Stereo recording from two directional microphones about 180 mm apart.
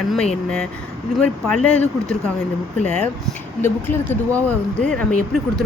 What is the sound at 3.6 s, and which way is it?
Speech, 10° left (ahead or behind).